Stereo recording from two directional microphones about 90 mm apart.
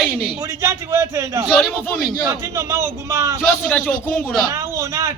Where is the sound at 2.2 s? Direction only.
35° right (ahead or behind).